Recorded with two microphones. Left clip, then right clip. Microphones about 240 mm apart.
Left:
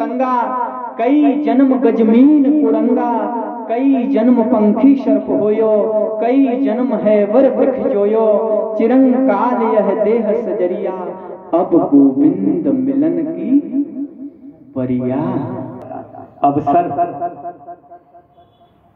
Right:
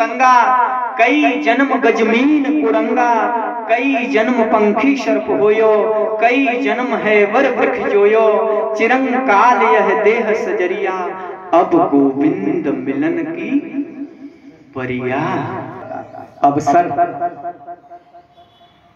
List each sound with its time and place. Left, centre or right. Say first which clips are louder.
0.0 s a woman's voice: right 6 dB; right
14.8 s speech: even; right